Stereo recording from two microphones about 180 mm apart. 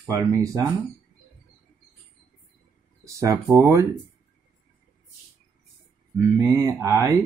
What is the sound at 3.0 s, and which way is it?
Speech, 15° right (ahead or behind).